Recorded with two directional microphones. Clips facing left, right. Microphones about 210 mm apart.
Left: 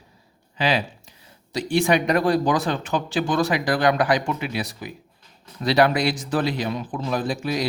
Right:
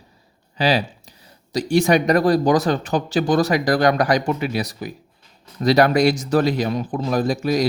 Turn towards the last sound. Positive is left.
turn(degrees=-40)  # may be behind; listen again after turning